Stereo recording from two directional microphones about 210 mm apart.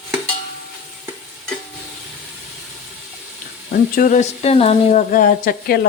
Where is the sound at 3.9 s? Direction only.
40° left (ahead or behind).